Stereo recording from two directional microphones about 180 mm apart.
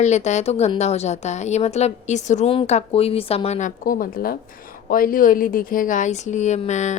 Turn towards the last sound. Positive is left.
turn(degrees=40)  # may be behind; listen again after turning